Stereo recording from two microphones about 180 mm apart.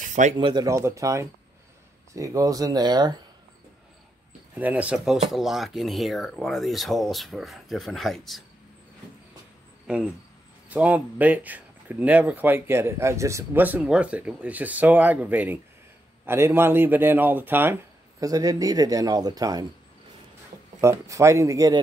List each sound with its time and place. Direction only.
0.0 s a sound: 45° right (ahead or behind)
0.4 s speech: 25° right (ahead or behind)
4.6 s speech: 10° right (ahead or behind)
10.7 s speech: 10° right (ahead or behind)
20.8 s speech: 15° right (ahead or behind)